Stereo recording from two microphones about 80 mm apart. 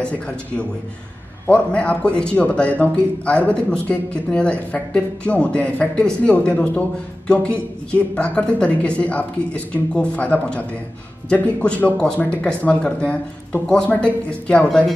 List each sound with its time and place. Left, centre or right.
0.0 s speech: centre